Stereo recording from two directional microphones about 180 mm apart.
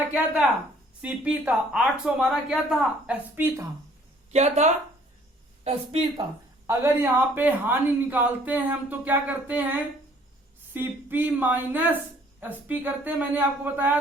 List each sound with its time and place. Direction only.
1.0 s speech: 5° right (ahead or behind)
4.3 s speech: 40° right (ahead or behind)
6.7 s speech: 15° right (ahead or behind)